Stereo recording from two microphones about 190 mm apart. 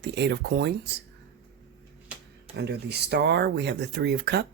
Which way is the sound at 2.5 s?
60° right (ahead or behind).